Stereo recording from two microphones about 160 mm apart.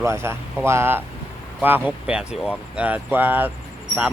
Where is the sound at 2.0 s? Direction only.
5° right (ahead or behind).